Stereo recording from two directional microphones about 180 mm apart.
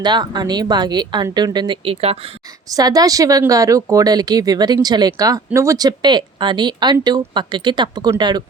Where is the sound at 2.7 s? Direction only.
20° right (ahead or behind).